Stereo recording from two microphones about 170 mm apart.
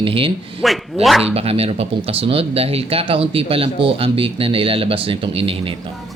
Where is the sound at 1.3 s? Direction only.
35° right (ahead or behind).